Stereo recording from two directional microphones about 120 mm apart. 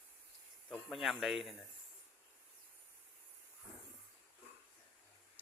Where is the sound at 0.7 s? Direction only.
Centre (ahead or behind).